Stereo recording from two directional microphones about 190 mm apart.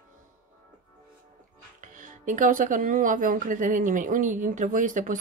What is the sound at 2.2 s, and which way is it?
Speech, 45° right (ahead or behind).